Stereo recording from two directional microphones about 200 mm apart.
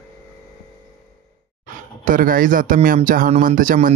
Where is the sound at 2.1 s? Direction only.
45° right (ahead or behind).